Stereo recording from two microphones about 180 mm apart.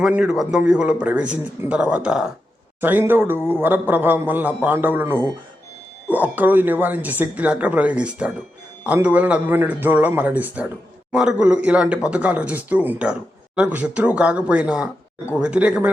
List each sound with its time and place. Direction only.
0.0 s speech: 5° right (ahead or behind)